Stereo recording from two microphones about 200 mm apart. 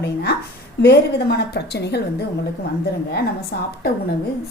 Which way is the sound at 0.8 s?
55° left (ahead or behind).